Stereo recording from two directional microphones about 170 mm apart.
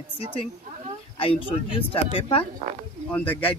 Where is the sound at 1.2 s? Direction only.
30° left (ahead or behind).